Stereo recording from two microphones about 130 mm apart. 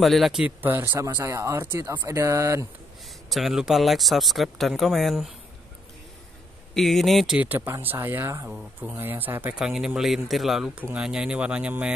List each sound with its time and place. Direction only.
0.0 s speech: centre (ahead or behind)
0.6 s speech: 15° right (ahead or behind)
3.3 s speech: centre (ahead or behind)
6.7 s speech: centre (ahead or behind)
7.3 s speech: 15° right (ahead or behind)
9.6 s speech: 5° right (ahead or behind)